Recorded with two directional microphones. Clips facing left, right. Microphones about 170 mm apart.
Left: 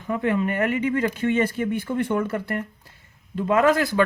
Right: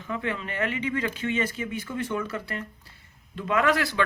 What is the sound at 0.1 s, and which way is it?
Speech, 50° left (ahead or behind).